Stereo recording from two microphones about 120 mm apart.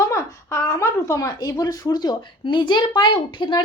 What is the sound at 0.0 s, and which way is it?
A woman's voice, 25° left (ahead or behind).